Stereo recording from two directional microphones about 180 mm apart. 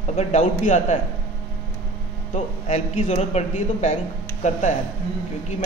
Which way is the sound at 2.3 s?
40° left (ahead or behind).